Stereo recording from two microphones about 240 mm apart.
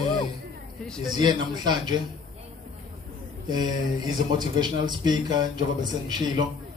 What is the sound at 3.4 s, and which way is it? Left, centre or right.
Speech, centre.